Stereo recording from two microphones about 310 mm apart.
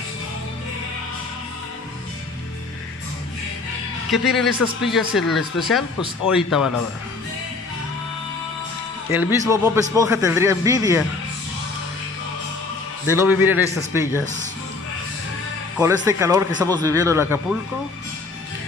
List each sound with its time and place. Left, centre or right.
4.1 s speech: centre
9.1 s speech: centre
13.0 s speech: centre
14.2 s speech: right
15.8 s speech: centre